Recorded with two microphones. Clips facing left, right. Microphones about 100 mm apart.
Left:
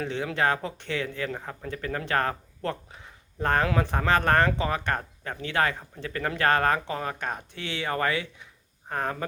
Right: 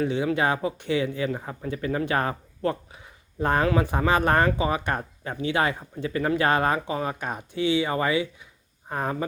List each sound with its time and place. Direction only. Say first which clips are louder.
0.0 s speech: right 3 dB; 10° right (ahead or behind)